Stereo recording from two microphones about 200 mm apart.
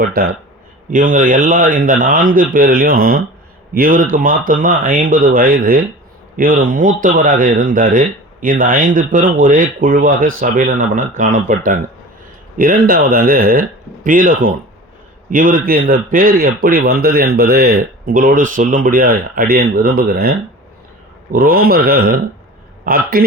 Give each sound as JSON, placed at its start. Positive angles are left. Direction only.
{"t": 0.0, "sound": "speech", "side_deg": -50}